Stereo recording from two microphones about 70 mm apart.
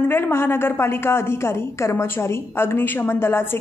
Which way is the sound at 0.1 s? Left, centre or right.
Left.